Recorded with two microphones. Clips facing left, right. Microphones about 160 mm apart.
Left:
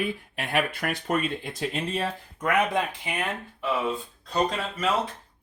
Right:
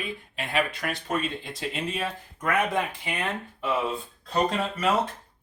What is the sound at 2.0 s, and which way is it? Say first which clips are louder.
Speech: left 2 dB; 20° left (ahead or behind).